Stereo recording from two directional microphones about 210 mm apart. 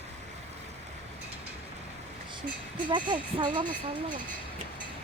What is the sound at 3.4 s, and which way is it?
Speech, 20° right (ahead or behind).